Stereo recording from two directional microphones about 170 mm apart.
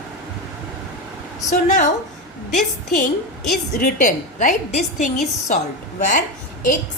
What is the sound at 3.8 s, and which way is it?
A woman's voice, 50° left (ahead or behind).